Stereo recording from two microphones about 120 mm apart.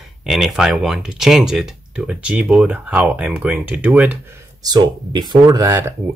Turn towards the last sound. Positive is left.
turn(degrees=-25)  # may be behind; listen again after turning